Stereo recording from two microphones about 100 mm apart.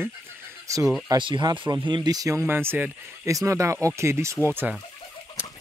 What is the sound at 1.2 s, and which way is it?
Speech, 50° right (ahead or behind).